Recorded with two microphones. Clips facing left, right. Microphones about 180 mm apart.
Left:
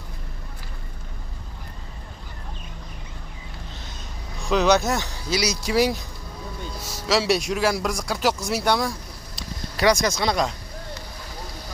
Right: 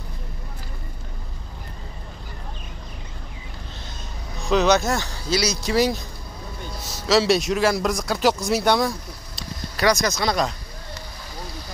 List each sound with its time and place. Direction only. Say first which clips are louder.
4.5 s speech: right 2 dB; 5° left (ahead or behind)
4.8 s speech: right 1 dB; 15° left (ahead or behind)
7.1 s speech: right 3 dB; 10° left (ahead or behind)
9.8 s speech: left 1 dB; 25° left (ahead or behind)
10.1 s speech: even; 15° left (ahead or behind)